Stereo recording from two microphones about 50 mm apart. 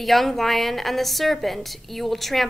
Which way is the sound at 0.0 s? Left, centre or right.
Centre.